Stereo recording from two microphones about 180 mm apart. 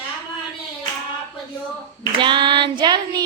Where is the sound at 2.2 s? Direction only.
25° right (ahead or behind).